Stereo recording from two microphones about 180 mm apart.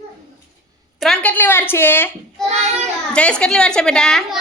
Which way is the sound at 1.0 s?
5° left (ahead or behind).